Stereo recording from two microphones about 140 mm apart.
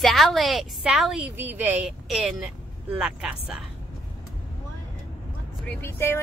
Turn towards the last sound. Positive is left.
turn(degrees=15)  # may be behind; listen again after turning